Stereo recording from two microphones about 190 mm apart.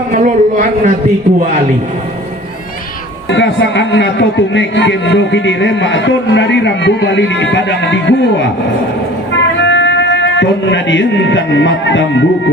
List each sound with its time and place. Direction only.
0.1 s a sound: 40° right (ahead or behind)
3.2 s a man's voice: 70° left (ahead or behind)
9.3 s music: 70° left (ahead or behind)